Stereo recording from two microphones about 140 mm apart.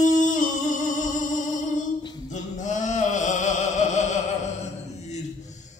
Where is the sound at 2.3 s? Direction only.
60° left (ahead or behind).